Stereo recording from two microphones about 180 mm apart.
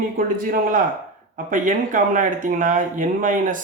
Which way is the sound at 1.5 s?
45° right (ahead or behind).